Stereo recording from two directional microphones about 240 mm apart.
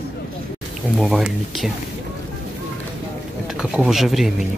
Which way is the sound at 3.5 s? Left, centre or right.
Centre.